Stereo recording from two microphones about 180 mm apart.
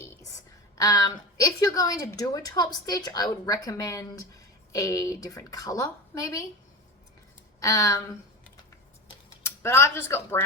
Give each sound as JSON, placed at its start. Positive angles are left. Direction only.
{"t": 0.8, "sound": "a woman's voice", "side_deg": 20}
{"t": 7.6, "sound": "a woman's voice", "side_deg": 20}
{"t": 9.4, "sound": "speech", "side_deg": 15}